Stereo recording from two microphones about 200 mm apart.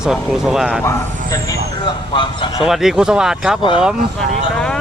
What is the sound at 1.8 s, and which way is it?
Speech, 25° left (ahead or behind).